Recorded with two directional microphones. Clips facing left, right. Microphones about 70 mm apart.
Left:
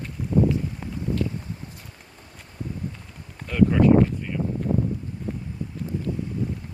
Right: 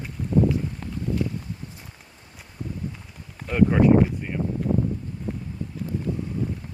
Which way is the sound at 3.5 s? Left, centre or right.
Right.